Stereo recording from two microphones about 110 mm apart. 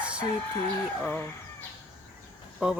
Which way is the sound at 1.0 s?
20° left (ahead or behind).